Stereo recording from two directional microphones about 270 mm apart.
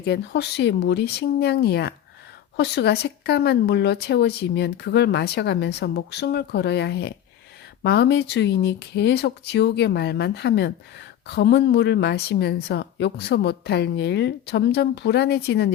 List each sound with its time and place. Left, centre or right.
0.0 s speech: left